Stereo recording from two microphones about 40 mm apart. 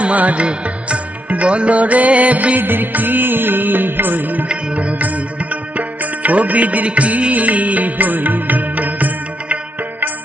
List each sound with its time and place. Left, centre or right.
0.0 s music: right
4.7 s music: right